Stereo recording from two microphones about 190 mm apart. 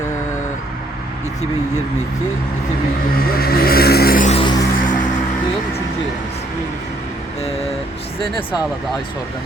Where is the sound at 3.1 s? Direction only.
50° left (ahead or behind).